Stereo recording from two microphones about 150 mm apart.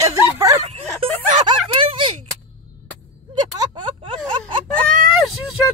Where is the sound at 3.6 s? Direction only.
30° right (ahead or behind).